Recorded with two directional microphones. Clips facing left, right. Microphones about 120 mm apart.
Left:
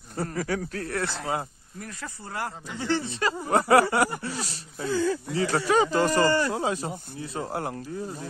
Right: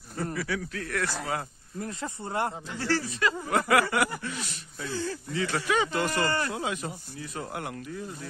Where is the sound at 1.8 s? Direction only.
25° right (ahead or behind).